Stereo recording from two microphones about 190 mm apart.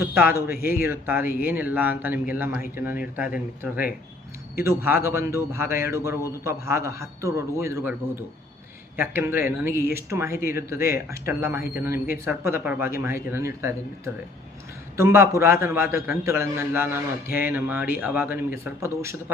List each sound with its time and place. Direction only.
0.0 s speech: 15° right (ahead or behind)
0.5 s speech: 50° left (ahead or behind)
0.8 s a man's voice: 10° right (ahead or behind)
9.0 s a man's voice: 10° right (ahead or behind)